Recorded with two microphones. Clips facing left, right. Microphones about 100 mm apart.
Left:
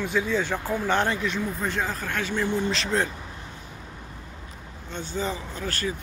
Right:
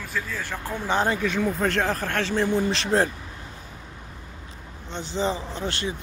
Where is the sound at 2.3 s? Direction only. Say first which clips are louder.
Right 3 dB; 35° right (ahead or behind).